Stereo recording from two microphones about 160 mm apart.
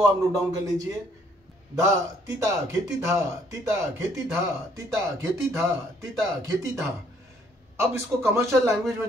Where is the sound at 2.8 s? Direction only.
20° right (ahead or behind).